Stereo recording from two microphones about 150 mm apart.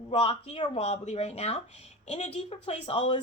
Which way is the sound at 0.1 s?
40° left (ahead or behind).